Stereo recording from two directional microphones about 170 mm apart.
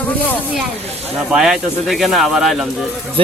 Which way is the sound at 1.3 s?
5° right (ahead or behind).